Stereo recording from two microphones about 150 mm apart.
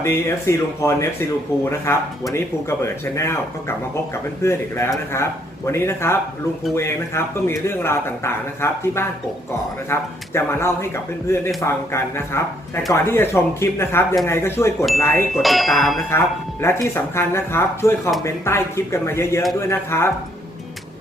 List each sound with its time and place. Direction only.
0.0 s speech: 15° left (ahead or behind)
15.4 s speech: centre (ahead or behind)
16.0 s speech: 15° left (ahead or behind)